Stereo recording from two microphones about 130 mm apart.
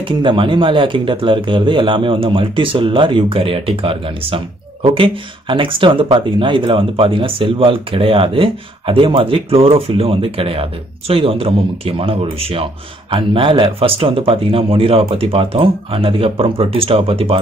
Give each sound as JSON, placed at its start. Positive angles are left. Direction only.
{"t": 0.2, "sound": "speech", "side_deg": -40}